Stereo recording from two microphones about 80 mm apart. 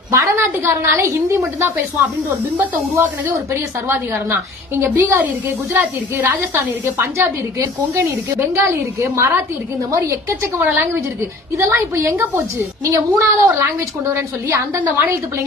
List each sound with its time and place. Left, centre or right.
0.1 s a sound: right
0.5 s a woman's voice: right
10.6 s a woman's voice: right